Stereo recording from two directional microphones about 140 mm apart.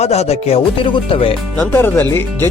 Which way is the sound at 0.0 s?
50° left (ahead or behind).